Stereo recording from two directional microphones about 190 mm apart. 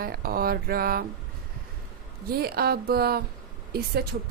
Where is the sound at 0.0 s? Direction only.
50° right (ahead or behind).